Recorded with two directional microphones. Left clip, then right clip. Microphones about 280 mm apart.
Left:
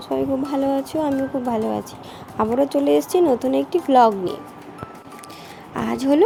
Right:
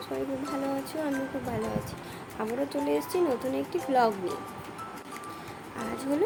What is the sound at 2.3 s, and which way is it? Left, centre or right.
Speech, left.